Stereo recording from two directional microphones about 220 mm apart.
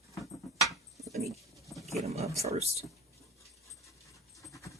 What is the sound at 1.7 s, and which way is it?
Wild animals, centre (ahead or behind).